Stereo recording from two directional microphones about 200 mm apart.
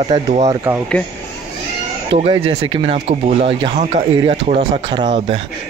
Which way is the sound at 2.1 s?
25° right (ahead or behind).